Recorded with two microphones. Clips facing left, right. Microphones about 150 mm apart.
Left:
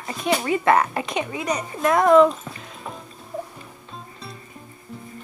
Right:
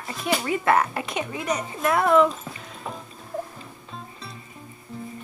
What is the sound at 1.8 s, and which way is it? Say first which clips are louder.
Speech: left 4 dB; 15° left (ahead or behind).